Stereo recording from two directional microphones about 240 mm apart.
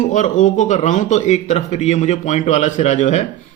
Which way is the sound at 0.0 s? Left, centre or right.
Left.